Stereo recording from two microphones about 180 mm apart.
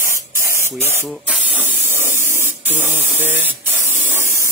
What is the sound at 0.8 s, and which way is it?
Speech, 15° right (ahead or behind).